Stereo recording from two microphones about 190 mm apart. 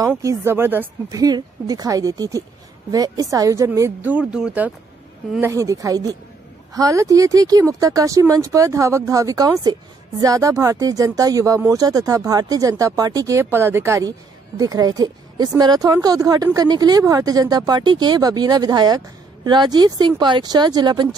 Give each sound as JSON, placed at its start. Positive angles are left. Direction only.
{"t": 0.1, "sound": "speech", "side_deg": -15}
{"t": 5.4, "sound": "speech", "side_deg": -15}